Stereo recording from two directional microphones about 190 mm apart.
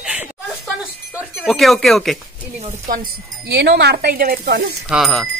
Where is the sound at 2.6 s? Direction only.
40° right (ahead or behind).